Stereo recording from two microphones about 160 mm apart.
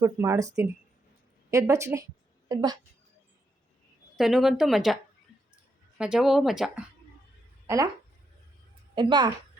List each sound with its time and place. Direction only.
0.0 s speech: 20° right (ahead or behind)
4.2 s speech: 5° right (ahead or behind)
6.0 s speech: 5° right (ahead or behind)
7.7 s speech: 20° right (ahead or behind)
9.0 s speech: 30° right (ahead or behind)